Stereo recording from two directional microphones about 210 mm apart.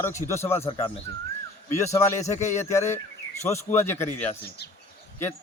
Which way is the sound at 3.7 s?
10° left (ahead or behind).